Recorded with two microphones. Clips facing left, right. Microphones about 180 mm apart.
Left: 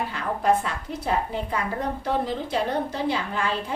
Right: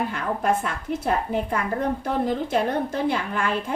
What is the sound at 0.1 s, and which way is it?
A woman's voice, 50° right (ahead or behind).